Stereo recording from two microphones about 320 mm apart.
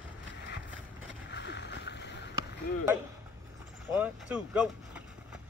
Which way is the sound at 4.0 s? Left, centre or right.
Centre.